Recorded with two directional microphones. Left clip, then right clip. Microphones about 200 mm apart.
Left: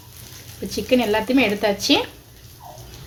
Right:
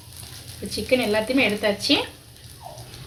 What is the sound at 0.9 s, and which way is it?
A woman's voice, 40° left (ahead or behind).